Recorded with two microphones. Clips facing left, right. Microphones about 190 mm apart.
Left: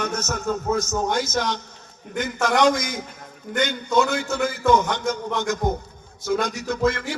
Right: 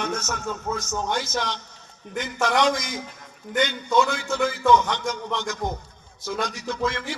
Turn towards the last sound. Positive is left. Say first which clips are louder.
# left 4 dB
turn(degrees=45)  # may be behind; listen again after turning